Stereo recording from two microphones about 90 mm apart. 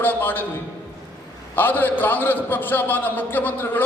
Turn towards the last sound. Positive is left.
turn(degrees=20)  # may be behind; listen again after turning